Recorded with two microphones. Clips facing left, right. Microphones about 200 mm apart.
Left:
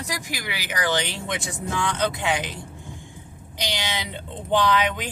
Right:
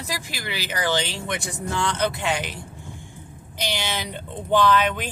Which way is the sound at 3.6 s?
15° left (ahead or behind).